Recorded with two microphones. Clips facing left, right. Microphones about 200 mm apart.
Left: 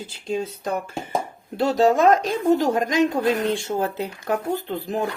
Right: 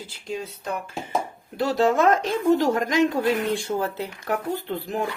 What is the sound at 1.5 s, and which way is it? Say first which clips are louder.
Speech: left 2 dB; 25° left (ahead or behind).